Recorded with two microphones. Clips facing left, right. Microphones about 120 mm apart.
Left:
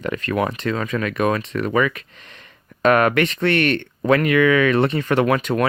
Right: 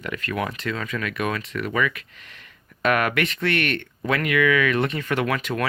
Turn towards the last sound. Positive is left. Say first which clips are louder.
# left 6 dB
turn(degrees=35)  # may be behind; listen again after turning